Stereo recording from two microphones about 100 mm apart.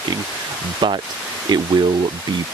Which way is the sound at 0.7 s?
55° right (ahead or behind).